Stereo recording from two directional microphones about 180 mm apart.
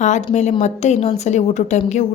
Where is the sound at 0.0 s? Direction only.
40° left (ahead or behind).